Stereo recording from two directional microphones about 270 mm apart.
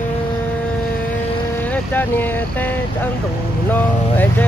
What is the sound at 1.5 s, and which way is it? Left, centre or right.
Speech, centre.